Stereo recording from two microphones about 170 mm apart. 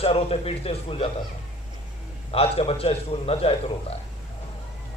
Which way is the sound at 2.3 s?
35° left (ahead or behind).